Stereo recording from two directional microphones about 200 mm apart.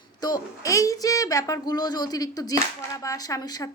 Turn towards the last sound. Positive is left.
turn(degrees=20)  # may be behind; listen again after turning